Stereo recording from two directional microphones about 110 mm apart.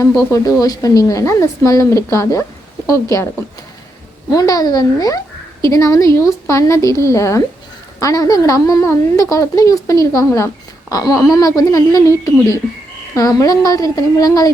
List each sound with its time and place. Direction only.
0.3 s a woman's voice: 30° left (ahead or behind)